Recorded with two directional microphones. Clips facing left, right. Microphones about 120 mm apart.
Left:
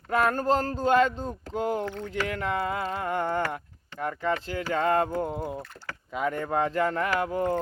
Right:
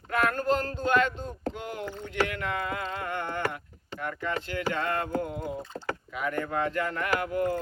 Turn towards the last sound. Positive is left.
turn(degrees=35)  # may be behind; listen again after turning